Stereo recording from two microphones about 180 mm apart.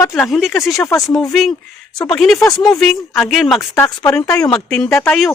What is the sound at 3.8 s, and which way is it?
Speech, 15° left (ahead or behind).